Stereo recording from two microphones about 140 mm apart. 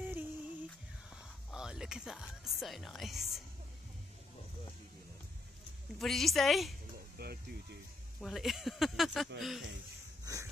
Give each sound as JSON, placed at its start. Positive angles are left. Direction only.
{"t": 0.0, "sound": "music", "side_deg": -15}
{"t": 1.1, "sound": "speech", "side_deg": -5}
{"t": 5.9, "sound": "speech", "side_deg": 0}
{"t": 7.2, "sound": "a sound", "side_deg": -90}
{"t": 8.2, "sound": "speech", "side_deg": 0}
{"t": 10.2, "sound": "a sound", "side_deg": -25}